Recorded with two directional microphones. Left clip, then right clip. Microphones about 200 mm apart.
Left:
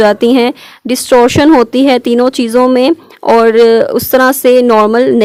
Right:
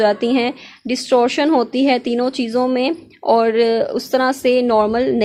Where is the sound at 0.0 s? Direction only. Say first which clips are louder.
Left 8 dB; 45° left (ahead or behind).